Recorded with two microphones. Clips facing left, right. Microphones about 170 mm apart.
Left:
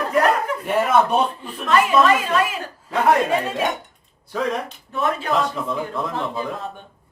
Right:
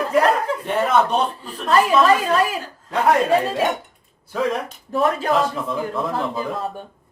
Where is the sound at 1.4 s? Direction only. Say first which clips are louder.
Right 1 dB; 40° right (ahead or behind).